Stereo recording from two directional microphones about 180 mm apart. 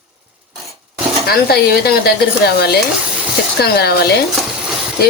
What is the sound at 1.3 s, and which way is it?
Speech, 60° left (ahead or behind).